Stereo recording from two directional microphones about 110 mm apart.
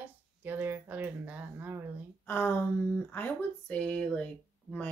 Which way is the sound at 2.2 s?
20° left (ahead or behind).